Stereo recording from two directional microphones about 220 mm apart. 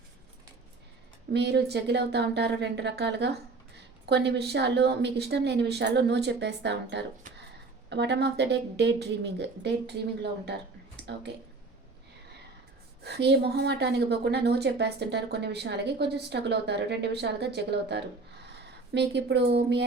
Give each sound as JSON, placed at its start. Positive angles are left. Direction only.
{"t": 1.3, "sound": "a woman's voice", "side_deg": -50}
{"t": 13.0, "sound": "a woman's voice", "side_deg": -50}